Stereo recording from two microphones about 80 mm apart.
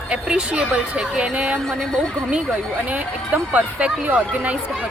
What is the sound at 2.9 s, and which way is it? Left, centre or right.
Speech, centre.